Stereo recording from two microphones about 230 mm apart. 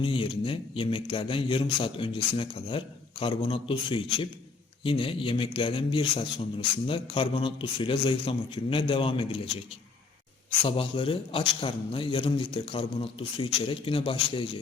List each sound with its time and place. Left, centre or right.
0.0 s speech: left
10.6 s speech: left